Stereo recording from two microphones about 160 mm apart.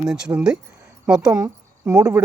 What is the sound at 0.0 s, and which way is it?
Speech, 5° right (ahead or behind).